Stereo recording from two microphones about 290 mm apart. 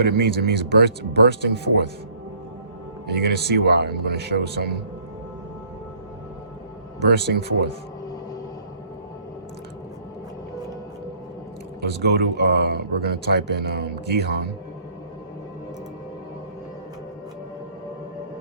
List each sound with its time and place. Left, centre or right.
0.0 s speech: right
3.1 s speech: right
7.1 s speech: right
11.9 s speech: right